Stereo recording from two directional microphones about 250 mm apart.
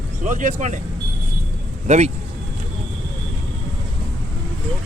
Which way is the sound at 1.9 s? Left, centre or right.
Right.